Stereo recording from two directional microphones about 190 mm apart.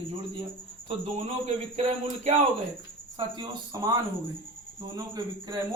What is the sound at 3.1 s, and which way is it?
Speech, 20° right (ahead or behind).